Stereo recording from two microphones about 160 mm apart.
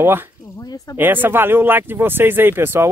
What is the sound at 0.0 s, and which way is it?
Speech, 15° right (ahead or behind).